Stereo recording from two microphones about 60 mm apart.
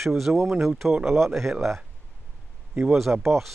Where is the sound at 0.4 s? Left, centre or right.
Right.